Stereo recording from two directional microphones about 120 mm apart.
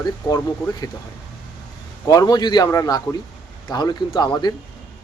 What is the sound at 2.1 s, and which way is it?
Speech, 35° left (ahead or behind).